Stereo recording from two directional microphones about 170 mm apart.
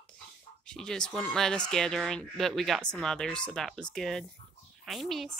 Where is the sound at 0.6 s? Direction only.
5° left (ahead or behind).